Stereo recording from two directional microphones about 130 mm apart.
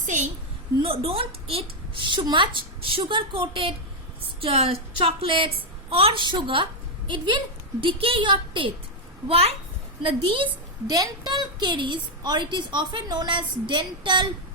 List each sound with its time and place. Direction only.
0.0 s a woman's voice: 65° right (ahead or behind)
0.8 s a woman's voice: 45° right (ahead or behind)
10.8 s a woman's voice: 30° right (ahead or behind)